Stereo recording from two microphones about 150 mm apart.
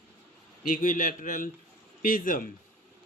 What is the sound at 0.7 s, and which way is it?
A man's voice, 65° left (ahead or behind).